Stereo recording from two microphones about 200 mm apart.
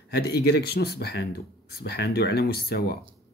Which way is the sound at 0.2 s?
50° left (ahead or behind).